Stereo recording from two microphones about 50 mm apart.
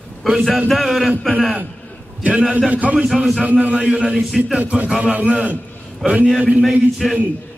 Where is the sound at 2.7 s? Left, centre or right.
Right.